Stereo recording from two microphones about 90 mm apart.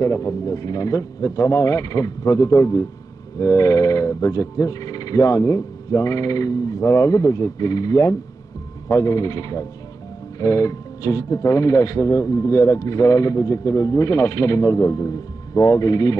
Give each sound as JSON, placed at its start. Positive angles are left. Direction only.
{"t": 0.0, "sound": "speech", "side_deg": 35}